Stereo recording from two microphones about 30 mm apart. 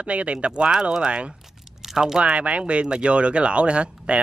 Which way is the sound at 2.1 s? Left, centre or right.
Right.